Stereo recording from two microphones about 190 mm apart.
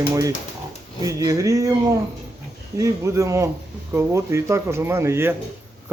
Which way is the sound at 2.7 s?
15° right (ahead or behind).